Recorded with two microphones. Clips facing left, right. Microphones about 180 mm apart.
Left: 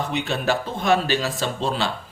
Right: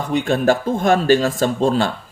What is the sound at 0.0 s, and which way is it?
Speech, 45° right (ahead or behind).